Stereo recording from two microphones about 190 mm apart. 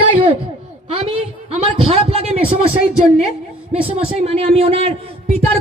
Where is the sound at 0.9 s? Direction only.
30° right (ahead or behind).